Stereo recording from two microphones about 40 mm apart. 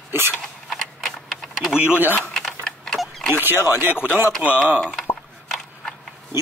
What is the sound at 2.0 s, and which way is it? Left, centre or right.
Speech, right.